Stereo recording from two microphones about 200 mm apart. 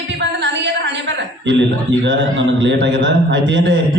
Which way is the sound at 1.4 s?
65° right (ahead or behind).